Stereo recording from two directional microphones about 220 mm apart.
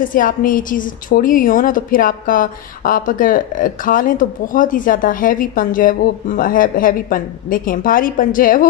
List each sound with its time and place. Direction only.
0.1 s a woman's voice: 40° left (ahead or behind)